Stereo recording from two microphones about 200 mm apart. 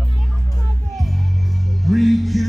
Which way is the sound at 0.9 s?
Centre (ahead or behind).